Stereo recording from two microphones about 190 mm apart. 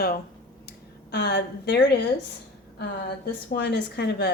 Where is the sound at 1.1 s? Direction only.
60° left (ahead or behind).